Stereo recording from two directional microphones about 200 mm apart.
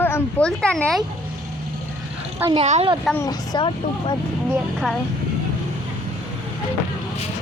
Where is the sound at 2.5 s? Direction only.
30° right (ahead or behind).